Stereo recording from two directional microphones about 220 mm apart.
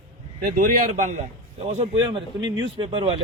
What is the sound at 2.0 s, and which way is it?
Speech, 20° right (ahead or behind).